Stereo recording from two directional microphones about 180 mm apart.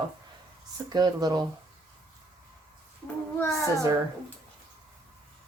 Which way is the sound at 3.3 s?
15° left (ahead or behind).